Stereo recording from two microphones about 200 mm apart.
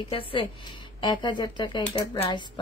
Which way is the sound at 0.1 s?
25° left (ahead or behind).